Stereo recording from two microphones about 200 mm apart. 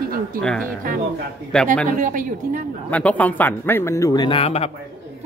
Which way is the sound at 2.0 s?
40° right (ahead or behind).